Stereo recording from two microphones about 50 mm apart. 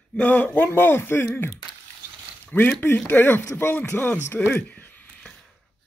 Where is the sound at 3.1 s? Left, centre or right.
Left.